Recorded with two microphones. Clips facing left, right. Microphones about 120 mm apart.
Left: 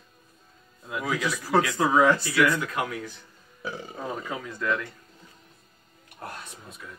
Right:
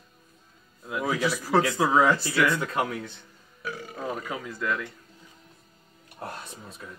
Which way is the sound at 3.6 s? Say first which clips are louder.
Left 1 dB; 25° left (ahead or behind).